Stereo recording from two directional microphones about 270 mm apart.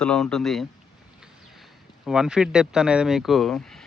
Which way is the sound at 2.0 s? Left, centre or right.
Centre.